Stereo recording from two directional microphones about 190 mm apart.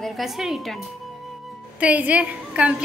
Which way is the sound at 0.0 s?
Centre (ahead or behind).